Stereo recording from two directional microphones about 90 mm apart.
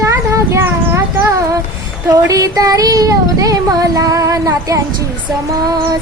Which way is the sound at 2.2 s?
40° right (ahead or behind).